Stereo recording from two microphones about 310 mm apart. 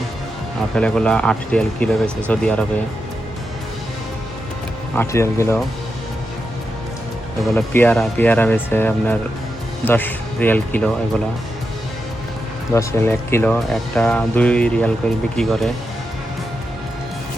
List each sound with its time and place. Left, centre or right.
0.8 s speech: centre
4.9 s speech: centre
7.4 s speech: centre
12.7 s speech: centre